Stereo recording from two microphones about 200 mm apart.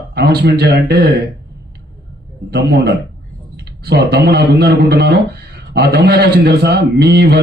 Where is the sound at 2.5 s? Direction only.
55° right (ahead or behind).